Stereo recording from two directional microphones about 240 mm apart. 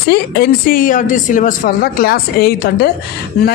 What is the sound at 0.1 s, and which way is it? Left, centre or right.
Speech, left.